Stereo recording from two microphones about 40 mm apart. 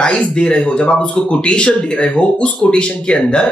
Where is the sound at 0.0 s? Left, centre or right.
Left.